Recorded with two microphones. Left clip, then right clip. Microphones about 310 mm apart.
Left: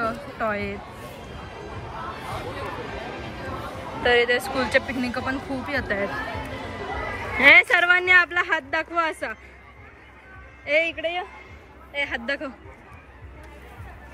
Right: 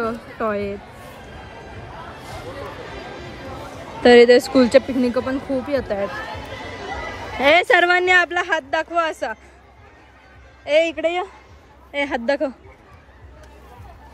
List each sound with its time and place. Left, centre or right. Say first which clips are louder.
0.0 s a sound: right 2 dB; centre
4.2 s speech: right 10 dB; centre
4.8 s speech: right 6 dB; centre
6.8 s a sound: even; right
7.3 s speech: even; centre
10.6 s speech: right 5 dB; centre
11.0 s speech: right 6 dB; right
12.0 s speech: right 6 dB; centre